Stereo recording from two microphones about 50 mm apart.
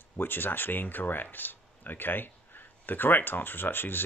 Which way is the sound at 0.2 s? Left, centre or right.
Left.